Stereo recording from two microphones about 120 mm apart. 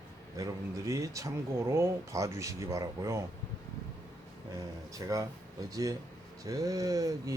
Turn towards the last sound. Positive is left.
turn(degrees=-30)  # may be behind; listen again after turning